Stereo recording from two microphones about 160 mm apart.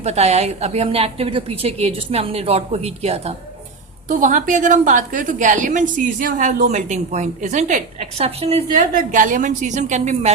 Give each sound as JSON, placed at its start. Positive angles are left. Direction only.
{"t": 0.0, "sound": "a woman's voice", "side_deg": -40}
{"t": 4.1, "sound": "a woman's voice", "side_deg": -55}
{"t": 9.0, "sound": "a woman's voice", "side_deg": -55}